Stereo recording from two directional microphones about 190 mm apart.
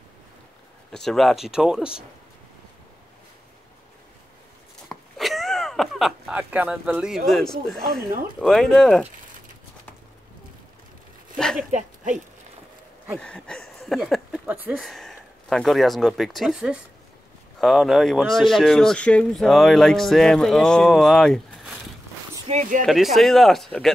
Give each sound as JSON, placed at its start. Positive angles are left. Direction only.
{"t": 0.9, "sound": "speech", "side_deg": 0}
{"t": 4.8, "sound": "a sound", "side_deg": 0}
{"t": 7.2, "sound": "speech", "side_deg": 0}
{"t": 7.9, "sound": "speech", "side_deg": -45}
{"t": 8.4, "sound": "speech", "side_deg": 0}
{"t": 11.3, "sound": "speech", "side_deg": 5}
{"t": 11.7, "sound": "speech", "side_deg": -40}
{"t": 13.2, "sound": "speech", "side_deg": 5}
{"t": 22.5, "sound": "speech", "side_deg": -40}
{"t": 22.8, "sound": "speech", "side_deg": 0}